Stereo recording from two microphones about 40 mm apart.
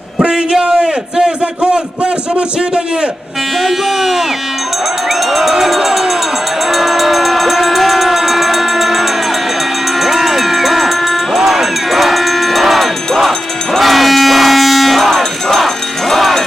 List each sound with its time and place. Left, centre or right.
0.6 s a sound: centre
3.6 s speech: centre
5.3 s crowd: centre
6.7 s train: centre
10.0 s a sound: centre
11.3 s crowd: centre